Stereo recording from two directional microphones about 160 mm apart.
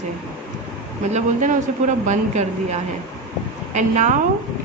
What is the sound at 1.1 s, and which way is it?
Speech, 50° right (ahead or behind).